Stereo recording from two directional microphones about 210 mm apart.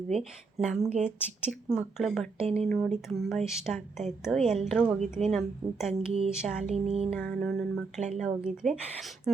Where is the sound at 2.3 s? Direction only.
30° right (ahead or behind).